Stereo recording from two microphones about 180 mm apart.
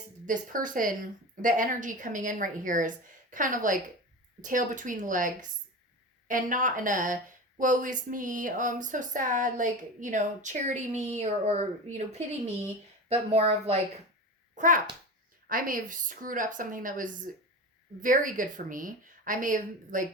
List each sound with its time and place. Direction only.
0.3 s a child's voice: 45° right (ahead or behind)